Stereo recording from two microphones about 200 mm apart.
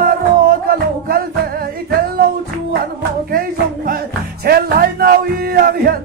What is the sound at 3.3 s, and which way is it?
Music, 45° right (ahead or behind).